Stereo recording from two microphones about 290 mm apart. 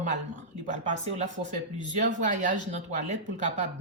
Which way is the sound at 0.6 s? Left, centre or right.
Right.